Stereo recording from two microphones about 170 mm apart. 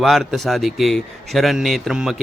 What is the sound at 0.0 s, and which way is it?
A man's voice, centre (ahead or behind).